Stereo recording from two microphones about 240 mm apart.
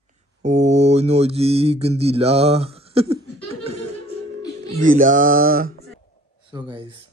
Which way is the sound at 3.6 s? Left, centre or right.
Right.